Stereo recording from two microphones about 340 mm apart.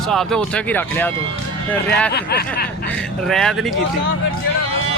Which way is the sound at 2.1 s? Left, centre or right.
Left.